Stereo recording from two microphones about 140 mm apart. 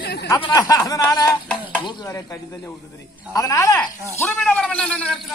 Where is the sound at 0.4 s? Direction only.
30° left (ahead or behind).